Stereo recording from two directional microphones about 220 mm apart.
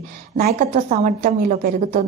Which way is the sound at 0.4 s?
35° right (ahead or behind).